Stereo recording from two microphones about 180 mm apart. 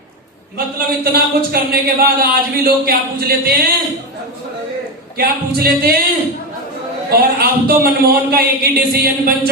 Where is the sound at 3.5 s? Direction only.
60° right (ahead or behind).